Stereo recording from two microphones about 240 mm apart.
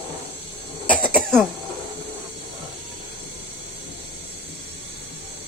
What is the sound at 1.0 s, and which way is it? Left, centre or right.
Cough, centre.